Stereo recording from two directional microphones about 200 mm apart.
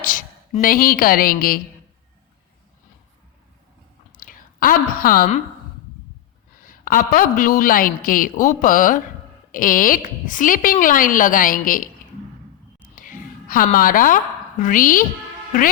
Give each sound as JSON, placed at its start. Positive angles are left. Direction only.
{"t": 0.0, "sound": "a woman's voice", "side_deg": 45}
{"t": 4.2, "sound": "speech", "side_deg": 45}
{"t": 6.7, "sound": "a woman's voice", "side_deg": 45}
{"t": 13.0, "sound": "a sound", "side_deg": 45}
{"t": 14.6, "sound": "a woman's voice", "side_deg": 40}